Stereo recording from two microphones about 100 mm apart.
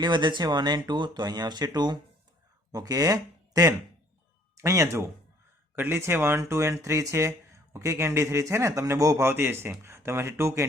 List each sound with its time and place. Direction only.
0.0 s speech: 50° right (ahead or behind); by 10.7 s 30° right (ahead or behind)